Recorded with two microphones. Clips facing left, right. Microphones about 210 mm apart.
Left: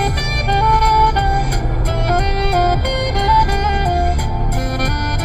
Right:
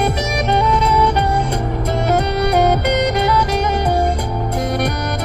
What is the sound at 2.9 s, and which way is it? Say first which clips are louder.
Music: right 3 dB; 70° right (ahead or behind).